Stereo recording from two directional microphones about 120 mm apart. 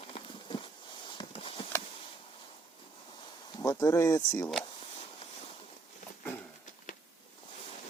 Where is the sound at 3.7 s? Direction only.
25° left (ahead or behind).